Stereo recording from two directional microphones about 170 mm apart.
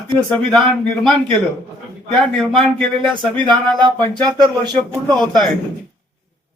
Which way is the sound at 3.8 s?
25° right (ahead or behind).